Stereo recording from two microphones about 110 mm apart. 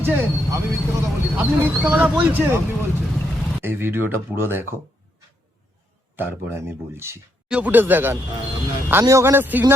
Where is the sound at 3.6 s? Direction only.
20° right (ahead or behind).